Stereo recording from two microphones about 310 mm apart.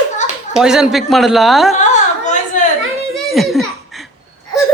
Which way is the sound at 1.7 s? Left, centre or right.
Left.